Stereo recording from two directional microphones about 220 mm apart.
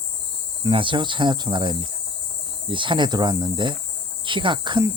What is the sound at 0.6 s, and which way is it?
Speech, 25° right (ahead or behind).